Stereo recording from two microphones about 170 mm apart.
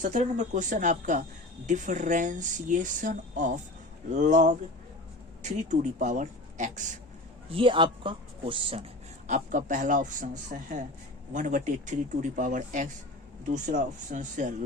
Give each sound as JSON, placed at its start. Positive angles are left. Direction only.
{"t": 0.0, "sound": "speech", "side_deg": -45}
{"t": 7.5, "sound": "speech", "side_deg": -30}
{"t": 9.2, "sound": "speech", "side_deg": -50}